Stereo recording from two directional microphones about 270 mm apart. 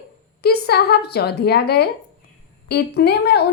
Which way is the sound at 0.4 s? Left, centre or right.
Left.